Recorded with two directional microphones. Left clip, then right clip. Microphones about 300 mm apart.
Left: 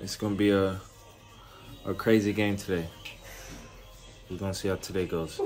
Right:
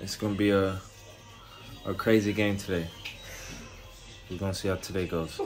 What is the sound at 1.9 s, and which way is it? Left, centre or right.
Speech, centre.